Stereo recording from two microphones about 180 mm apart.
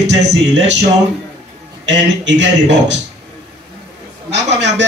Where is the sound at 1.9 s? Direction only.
85° right.